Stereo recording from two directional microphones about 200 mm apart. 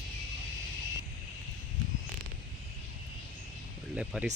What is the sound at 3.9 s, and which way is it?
Music, 5° right (ahead or behind).